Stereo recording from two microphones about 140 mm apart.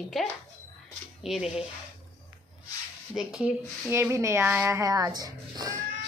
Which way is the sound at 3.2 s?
5° right (ahead or behind).